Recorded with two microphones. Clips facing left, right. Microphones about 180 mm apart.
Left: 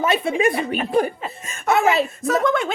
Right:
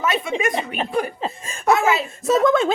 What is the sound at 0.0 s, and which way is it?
Speech, 30° left (ahead or behind).